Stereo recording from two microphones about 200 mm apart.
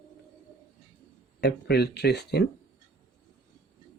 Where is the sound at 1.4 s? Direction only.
55° left (ahead or behind).